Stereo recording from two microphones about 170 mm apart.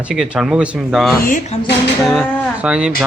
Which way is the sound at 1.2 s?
50° left (ahead or behind).